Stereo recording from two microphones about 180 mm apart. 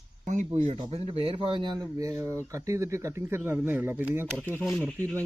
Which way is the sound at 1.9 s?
15° right (ahead or behind).